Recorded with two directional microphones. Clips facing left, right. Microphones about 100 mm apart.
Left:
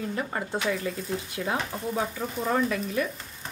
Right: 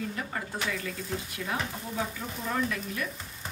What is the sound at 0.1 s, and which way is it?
Speech, 30° left (ahead or behind).